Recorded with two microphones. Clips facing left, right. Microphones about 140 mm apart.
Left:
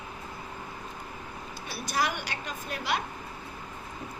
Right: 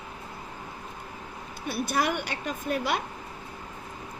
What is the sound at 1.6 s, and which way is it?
A woman's voice, 55° right (ahead or behind).